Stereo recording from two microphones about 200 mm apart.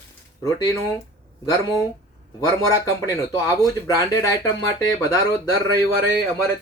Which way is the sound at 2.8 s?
15° left (ahead or behind).